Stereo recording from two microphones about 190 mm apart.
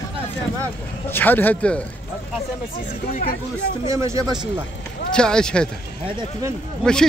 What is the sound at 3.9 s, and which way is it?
Speech, 15° right (ahead or behind).